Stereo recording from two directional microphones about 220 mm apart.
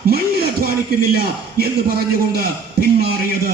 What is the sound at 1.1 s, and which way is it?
A man's voice, 45° right (ahead or behind).